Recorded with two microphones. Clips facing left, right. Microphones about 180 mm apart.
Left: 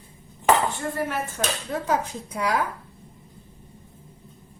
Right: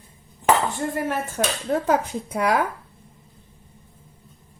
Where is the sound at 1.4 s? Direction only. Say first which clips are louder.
Right 5 dB; 50° right (ahead or behind).